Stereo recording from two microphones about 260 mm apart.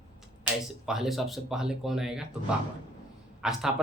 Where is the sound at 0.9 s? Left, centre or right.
Centre.